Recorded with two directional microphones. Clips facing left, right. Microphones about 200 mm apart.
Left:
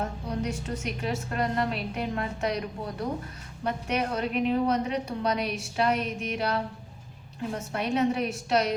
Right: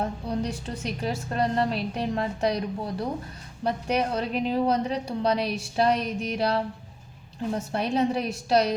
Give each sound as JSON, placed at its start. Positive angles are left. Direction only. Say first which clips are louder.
{"t": 0.0, "sound": "a woman's voice", "louder": "right 3 dB", "side_deg": -30}